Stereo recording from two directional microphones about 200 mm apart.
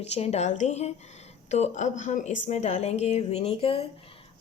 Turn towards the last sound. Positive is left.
turn(degrees=30)  # may be behind; listen again after turning